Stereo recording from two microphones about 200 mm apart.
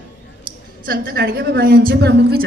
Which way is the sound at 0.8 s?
50° right (ahead or behind).